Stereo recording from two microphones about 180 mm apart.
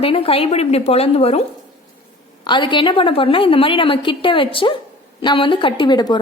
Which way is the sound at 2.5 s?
25° left (ahead or behind).